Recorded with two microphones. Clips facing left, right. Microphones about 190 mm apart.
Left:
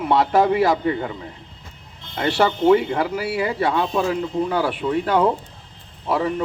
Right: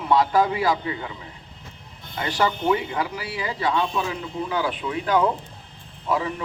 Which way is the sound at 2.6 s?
55° left (ahead or behind).